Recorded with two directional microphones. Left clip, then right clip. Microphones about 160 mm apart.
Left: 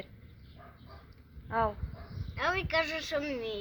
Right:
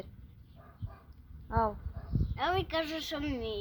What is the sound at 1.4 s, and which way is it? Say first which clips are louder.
Speech: left 1 dB; 15° left (ahead or behind).